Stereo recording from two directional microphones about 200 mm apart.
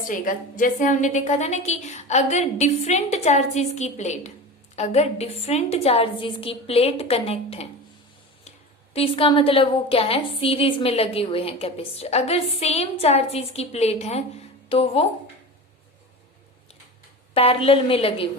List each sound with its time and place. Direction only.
0.0 s a woman's voice: 40° left (ahead or behind)
17.3 s a woman's voice: 30° left (ahead or behind)